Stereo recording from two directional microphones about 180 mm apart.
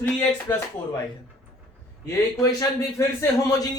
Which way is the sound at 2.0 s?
20° left (ahead or behind).